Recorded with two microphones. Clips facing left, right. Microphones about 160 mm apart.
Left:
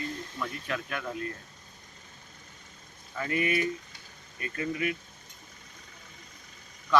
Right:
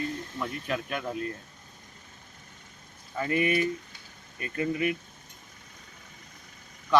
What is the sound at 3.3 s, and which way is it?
Speech, 40° right (ahead or behind).